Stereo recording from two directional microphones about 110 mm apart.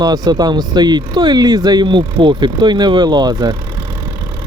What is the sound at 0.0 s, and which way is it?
Speech, 40° right (ahead or behind).